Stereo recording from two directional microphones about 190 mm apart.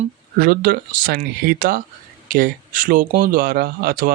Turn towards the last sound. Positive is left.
turn(degrees=-50)  # may be behind; listen again after turning